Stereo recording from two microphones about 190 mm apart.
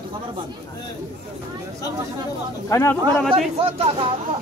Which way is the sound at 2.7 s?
15° left (ahead or behind).